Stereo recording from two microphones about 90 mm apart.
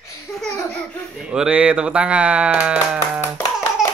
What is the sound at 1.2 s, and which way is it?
Speech, 10° right (ahead or behind).